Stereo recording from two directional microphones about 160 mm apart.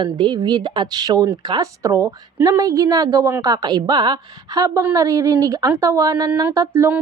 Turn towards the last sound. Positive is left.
turn(degrees=-15)  # may be behind; listen again after turning